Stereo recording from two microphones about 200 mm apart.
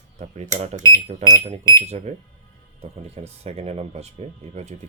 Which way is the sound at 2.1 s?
35° right (ahead or behind).